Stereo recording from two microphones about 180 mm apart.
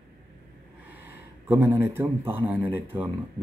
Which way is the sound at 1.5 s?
15° right (ahead or behind).